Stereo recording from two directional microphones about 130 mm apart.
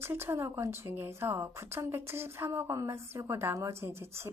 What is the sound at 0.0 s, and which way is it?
A woman's voice, 20° right (ahead or behind).